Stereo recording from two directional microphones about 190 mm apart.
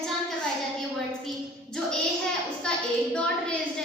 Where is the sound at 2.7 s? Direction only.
5° left (ahead or behind).